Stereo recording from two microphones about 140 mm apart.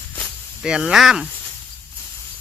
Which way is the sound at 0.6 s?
5° right (ahead or behind).